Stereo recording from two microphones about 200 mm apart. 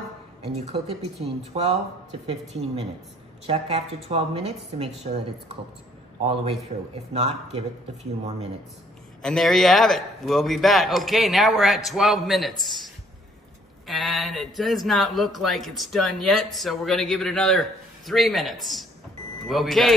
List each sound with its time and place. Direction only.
0.6 s a woman's voice: 35° right (ahead or behind)
6.2 s a man's voice: 30° right (ahead or behind)
9.2 s speech: centre (ahead or behind)